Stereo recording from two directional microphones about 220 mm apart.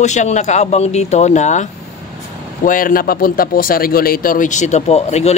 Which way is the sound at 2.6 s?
40° left (ahead or behind).